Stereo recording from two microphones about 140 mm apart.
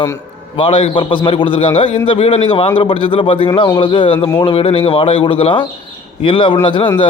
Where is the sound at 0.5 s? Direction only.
40° left (ahead or behind).